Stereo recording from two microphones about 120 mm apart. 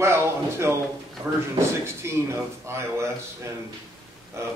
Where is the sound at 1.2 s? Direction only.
55° right (ahead or behind).